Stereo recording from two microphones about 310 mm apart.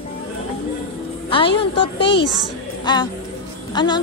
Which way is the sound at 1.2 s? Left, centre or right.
Centre.